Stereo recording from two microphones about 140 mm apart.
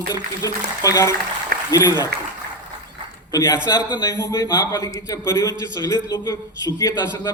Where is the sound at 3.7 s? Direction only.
25° left (ahead or behind).